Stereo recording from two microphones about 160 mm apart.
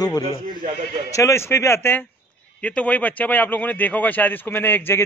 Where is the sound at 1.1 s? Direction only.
15° left (ahead or behind).